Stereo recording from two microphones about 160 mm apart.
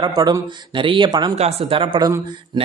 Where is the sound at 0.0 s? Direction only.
25° right (ahead or behind).